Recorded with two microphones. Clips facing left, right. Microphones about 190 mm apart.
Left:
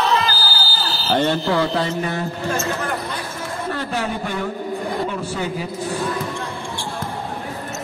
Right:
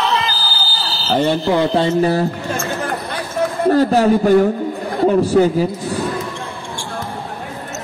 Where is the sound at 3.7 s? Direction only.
40° right (ahead or behind).